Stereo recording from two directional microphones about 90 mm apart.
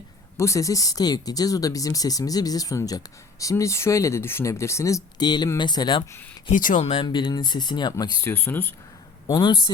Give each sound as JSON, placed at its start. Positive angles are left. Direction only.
{"t": 0.3, "sound": "speech", "side_deg": 35}
{"t": 5.2, "sound": "speech", "side_deg": 50}
{"t": 6.5, "sound": "speech", "side_deg": 90}
{"t": 6.9, "sound": "speech", "side_deg": 65}
{"t": 8.2, "sound": "speech", "side_deg": 20}
{"t": 9.2, "sound": "speech", "side_deg": 55}